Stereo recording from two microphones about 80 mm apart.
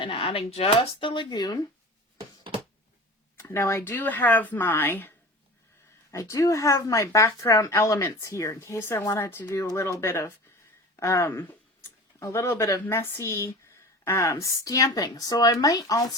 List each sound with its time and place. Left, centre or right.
0.7 s speech: left
3.3 s speech: left
3.8 s a woman's voice: left
6.1 s speech: left
11.3 s a sound: left
12.9 s speech: left